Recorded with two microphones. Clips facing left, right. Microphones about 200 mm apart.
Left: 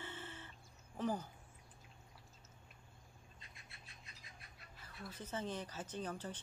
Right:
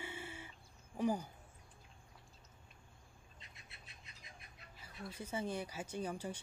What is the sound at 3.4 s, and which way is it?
Bird, 20° right (ahead or behind).